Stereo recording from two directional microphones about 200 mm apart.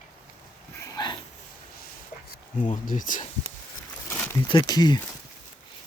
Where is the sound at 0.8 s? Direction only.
20° left (ahead or behind).